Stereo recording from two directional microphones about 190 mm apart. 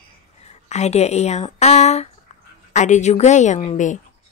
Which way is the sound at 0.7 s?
35° left (ahead or behind).